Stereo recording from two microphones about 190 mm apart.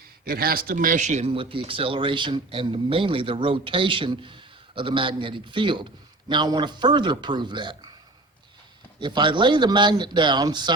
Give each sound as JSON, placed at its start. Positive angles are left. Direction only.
{"t": 0.3, "sound": "speech", "side_deg": -50}
{"t": 9.0, "sound": "speech", "side_deg": -25}